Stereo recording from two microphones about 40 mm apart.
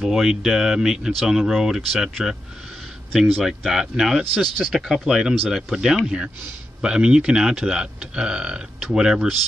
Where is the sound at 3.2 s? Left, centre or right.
Centre.